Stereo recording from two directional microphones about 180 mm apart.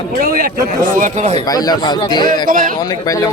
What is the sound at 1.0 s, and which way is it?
Speech, 40° right (ahead or behind).